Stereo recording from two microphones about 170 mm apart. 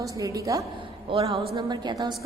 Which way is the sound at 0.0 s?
20° right (ahead or behind).